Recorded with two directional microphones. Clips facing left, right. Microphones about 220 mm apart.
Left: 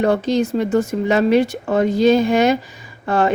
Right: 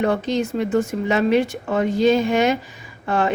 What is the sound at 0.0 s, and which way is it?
A woman's voice, 35° left (ahead or behind).